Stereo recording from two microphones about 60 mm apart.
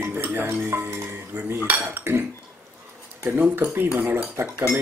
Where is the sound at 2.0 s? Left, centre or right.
Right.